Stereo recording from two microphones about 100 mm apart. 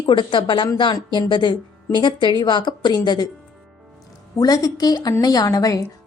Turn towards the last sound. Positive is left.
turn(degrees=35)  # may be behind; listen again after turning